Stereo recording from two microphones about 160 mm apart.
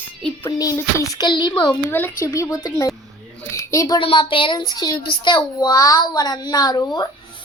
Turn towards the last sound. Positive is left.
turn(degrees=25)  # may be behind; listen again after turning